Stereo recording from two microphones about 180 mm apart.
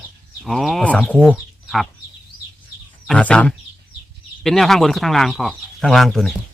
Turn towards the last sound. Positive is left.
turn(degrees=0)  # may be behind; listen again after turning